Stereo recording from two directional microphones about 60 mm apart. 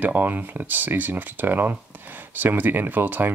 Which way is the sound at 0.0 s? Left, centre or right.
Right.